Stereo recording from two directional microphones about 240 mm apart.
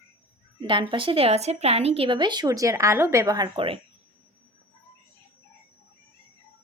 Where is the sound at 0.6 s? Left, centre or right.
Centre.